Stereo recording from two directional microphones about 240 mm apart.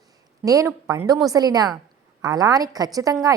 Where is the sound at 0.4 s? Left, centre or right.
Centre.